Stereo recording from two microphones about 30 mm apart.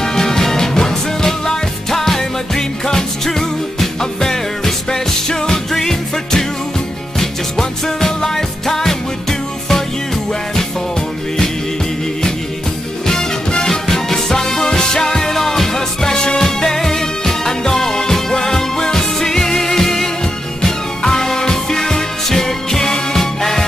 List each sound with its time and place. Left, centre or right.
0.0 s music: centre
5.7 s music: centre
13.0 s music: centre
15.3 s music: centre